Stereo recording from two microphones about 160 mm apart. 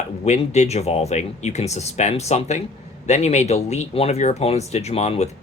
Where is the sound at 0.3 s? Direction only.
45° left (ahead or behind).